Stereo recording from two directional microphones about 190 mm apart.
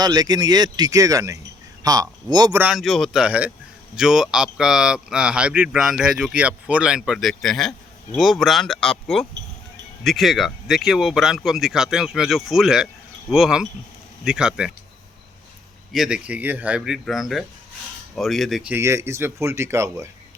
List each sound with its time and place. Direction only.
0.0 s speech: 20° right (ahead or behind)
2.6 s speech: 5° right (ahead or behind)
15.9 s speech: 5° right (ahead or behind)